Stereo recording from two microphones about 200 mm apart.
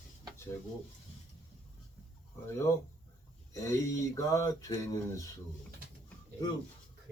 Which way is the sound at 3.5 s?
15° left (ahead or behind).